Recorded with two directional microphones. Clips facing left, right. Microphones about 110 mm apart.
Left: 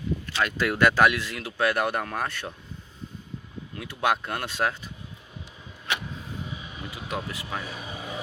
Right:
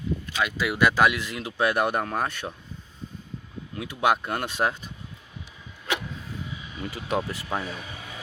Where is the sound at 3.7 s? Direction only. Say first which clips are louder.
Right 2 dB; 15° right (ahead or behind).